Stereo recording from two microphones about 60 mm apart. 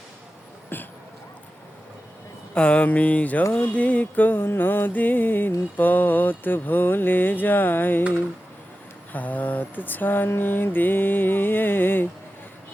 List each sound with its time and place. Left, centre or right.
0.7 s a sound: left
2.6 s music: centre
5.7 s mantra: left
9.1 s mantra: left